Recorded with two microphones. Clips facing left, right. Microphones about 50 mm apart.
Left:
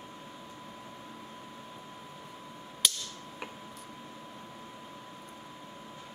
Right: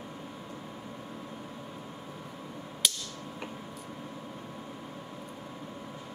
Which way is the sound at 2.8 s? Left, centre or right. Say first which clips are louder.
Even; centre.